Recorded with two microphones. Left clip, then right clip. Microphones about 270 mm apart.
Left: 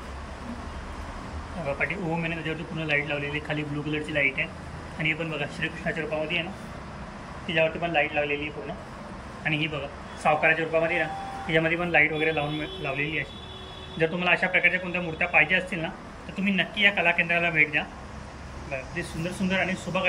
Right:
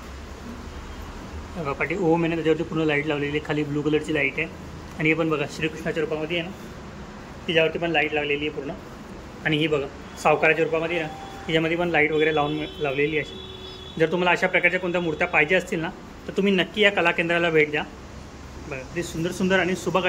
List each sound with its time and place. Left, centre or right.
1.7 s a man's voice: centre
7.4 s a man's voice: centre